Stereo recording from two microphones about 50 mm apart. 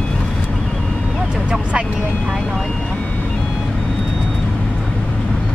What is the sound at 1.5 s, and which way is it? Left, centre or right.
Vehicle, right.